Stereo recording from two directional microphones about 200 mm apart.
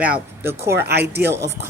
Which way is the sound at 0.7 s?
55° right (ahead or behind).